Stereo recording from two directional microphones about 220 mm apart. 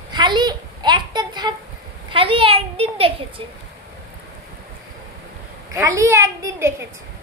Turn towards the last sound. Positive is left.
turn(degrees=-15)  # may be behind; listen again after turning